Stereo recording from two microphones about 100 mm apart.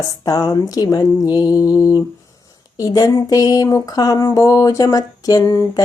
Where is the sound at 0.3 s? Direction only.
40° left (ahead or behind).